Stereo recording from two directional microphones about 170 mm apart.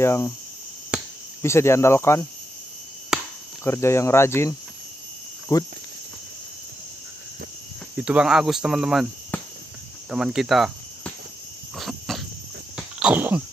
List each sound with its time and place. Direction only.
0.0 s speech: 15° left (ahead or behind)
0.9 s cricket: 5° right (ahead or behind)
1.4 s speech: 15° left (ahead or behind)
3.1 s cricket: 5° right (ahead or behind)
3.6 s speech: 15° left (ahead or behind)
7.9 s speech: 5° right (ahead or behind)
9.3 s cricket: 10° left (ahead or behind)
10.0 s cricket: 5° right (ahead or behind)
11.7 s cough: centre (ahead or behind)
12.7 s a sound: 5° right (ahead or behind)